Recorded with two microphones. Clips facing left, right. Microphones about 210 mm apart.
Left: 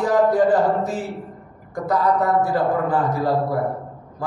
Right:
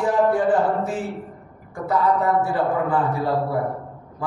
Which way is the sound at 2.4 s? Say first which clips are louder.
Left 2 dB; 40° left (ahead or behind).